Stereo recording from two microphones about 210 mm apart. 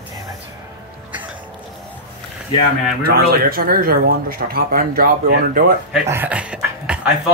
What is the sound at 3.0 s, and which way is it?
Speech, 45° right (ahead or behind).